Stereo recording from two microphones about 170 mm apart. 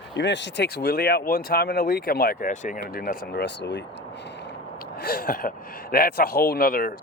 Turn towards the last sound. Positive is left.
turn(degrees=60)  # may be behind; listen again after turning